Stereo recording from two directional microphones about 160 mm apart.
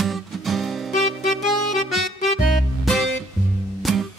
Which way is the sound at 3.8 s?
Centre (ahead or behind).